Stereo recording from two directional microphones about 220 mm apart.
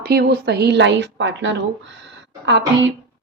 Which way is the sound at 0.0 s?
45° right (ahead or behind).